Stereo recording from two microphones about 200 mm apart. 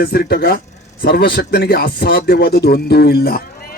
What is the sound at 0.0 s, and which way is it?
A man's voice, 50° left (ahead or behind).